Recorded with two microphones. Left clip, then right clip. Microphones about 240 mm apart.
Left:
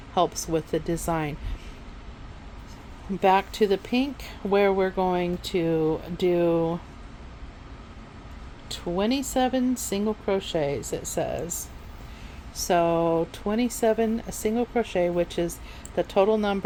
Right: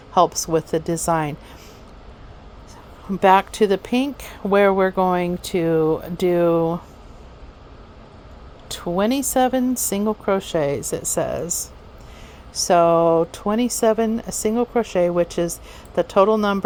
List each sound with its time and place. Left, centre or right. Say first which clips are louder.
0.1 s speech: right 7 dB; right
3.1 s speech: right 6 dB; right
8.7 s speech: right 5 dB; right